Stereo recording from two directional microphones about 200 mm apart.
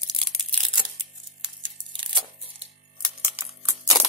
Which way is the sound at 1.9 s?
25° right (ahead or behind).